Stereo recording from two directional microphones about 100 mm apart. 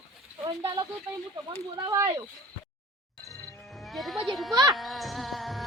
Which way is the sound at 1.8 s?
30° right (ahead or behind).